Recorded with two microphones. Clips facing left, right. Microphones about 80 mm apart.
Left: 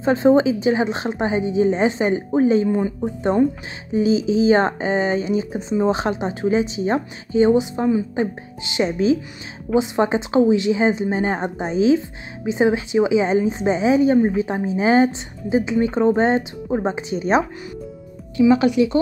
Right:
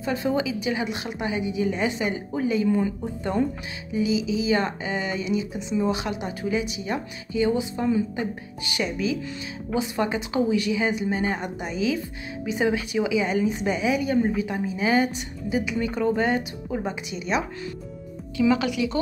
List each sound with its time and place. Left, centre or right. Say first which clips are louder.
0.0 s speech: left 10 dB; left
3.9 s a woman's voice: left 6 dB; left
18.5 s a woman's voice: left 9 dB; left